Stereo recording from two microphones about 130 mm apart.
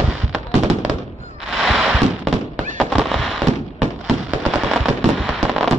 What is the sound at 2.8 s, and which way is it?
Fireworks, centre (ahead or behind).